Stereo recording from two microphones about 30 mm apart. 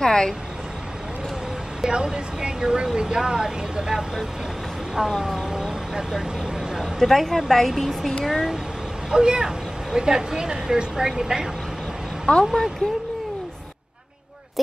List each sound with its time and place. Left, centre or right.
0.0 s vehicle: left
1.9 s speech: right
5.0 s speech: centre
5.5 s vehicle: right
7.0 s a woman's voice: centre
9.1 s speech: right
12.3 s speech: left